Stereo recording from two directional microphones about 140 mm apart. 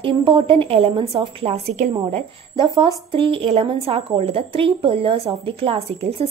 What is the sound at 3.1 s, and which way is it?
A woman's voice, 40° right (ahead or behind).